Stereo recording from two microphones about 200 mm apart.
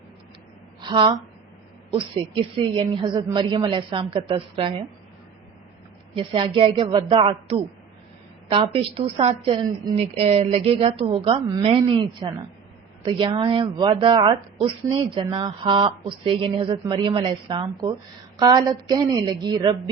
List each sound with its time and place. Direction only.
0.8 s speech: 25° right (ahead or behind)
6.1 s speech: 25° right (ahead or behind)